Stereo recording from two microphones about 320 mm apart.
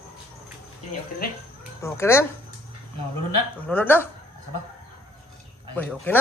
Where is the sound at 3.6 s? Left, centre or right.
Centre.